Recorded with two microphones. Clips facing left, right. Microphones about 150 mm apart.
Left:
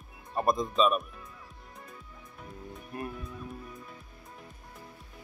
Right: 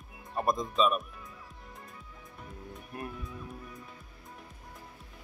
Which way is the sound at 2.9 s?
Centre (ahead or behind).